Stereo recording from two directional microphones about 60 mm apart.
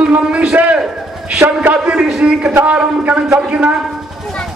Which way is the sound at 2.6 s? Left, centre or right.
Right.